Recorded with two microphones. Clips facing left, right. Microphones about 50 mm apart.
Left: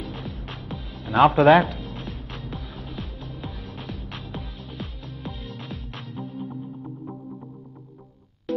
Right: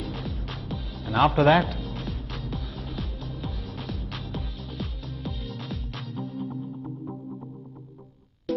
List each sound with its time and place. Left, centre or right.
0.0 s music: centre
1.0 s music: centre
6.0 s music: centre
8.5 s music: centre